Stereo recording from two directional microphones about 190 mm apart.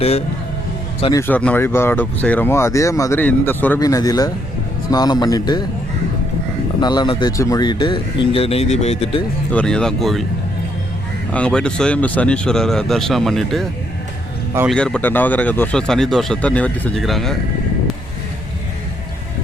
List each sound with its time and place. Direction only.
0.0 s speech: 35° left (ahead or behind)
1.3 s speech: 10° left (ahead or behind)
6.7 s speech: 20° left (ahead or behind)
9.5 s speech: 5° left (ahead or behind)
11.3 s speech: 5° left (ahead or behind)
14.7 s speech: 5° left (ahead or behind)